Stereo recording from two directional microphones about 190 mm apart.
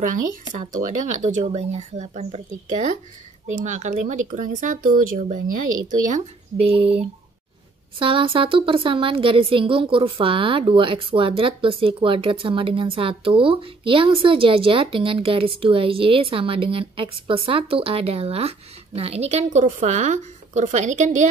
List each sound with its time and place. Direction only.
0.6 s speech: 45° right (ahead or behind)
8.0 s a woman's voice: 25° right (ahead or behind)